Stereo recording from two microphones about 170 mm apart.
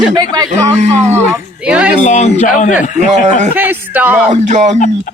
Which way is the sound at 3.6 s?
10° right (ahead or behind).